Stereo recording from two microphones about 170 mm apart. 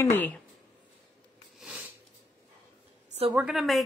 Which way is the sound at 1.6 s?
5° right (ahead or behind).